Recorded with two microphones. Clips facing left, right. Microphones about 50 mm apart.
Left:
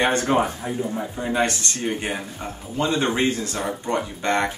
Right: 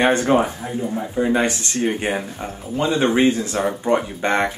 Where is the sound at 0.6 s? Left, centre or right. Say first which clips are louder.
Right 2 dB; centre.